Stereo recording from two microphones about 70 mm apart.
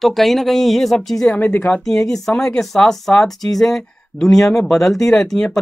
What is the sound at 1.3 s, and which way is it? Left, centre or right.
Speech, left.